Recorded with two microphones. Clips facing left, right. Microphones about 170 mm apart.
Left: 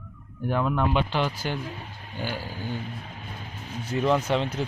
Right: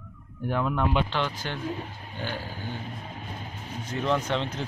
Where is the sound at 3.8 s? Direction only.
5° left (ahead or behind).